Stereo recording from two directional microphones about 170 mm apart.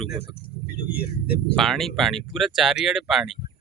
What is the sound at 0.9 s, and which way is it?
Speech, 70° left (ahead or behind).